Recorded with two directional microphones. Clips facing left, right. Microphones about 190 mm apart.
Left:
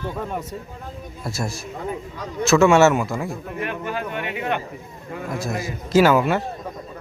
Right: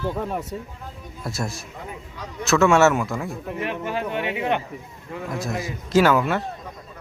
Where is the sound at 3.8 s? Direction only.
25° right (ahead or behind).